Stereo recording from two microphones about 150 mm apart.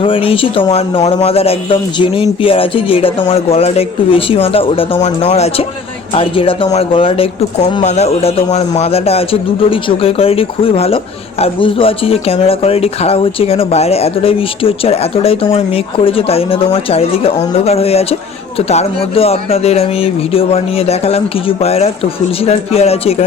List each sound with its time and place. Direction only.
0.0 s speech: 35° left (ahead or behind)
4.9 s speech: 50° left (ahead or behind)